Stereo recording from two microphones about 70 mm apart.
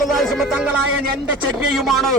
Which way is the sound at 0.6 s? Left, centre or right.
Centre.